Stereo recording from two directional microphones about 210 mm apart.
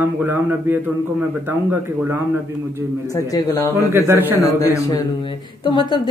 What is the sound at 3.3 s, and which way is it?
Speech, 15° left (ahead or behind).